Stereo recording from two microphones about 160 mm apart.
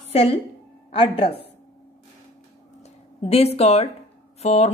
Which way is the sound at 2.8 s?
40° left (ahead or behind).